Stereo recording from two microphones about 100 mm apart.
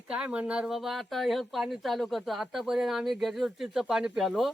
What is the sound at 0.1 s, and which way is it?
Speech, 10° right (ahead or behind).